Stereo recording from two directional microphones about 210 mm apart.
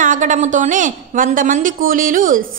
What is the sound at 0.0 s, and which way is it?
A woman's voice, 40° right (ahead or behind).